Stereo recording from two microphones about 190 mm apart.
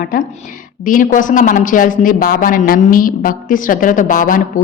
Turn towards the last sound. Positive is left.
turn(degrees=45)  # may be behind; listen again after turning